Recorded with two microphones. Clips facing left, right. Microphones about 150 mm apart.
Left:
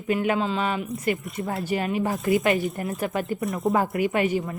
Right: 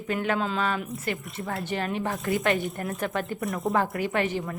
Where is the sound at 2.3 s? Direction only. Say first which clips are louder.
Left 3 dB; centre (ahead or behind).